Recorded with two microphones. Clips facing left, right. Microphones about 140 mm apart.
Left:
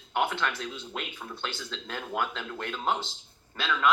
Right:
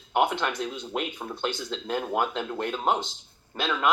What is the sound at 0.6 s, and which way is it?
Speech, 40° right (ahead or behind).